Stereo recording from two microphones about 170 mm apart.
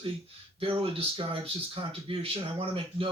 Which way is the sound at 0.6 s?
30° right (ahead or behind).